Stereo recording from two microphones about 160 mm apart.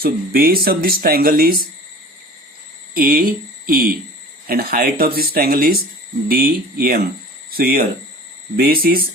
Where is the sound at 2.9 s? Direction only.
65° right (ahead or behind).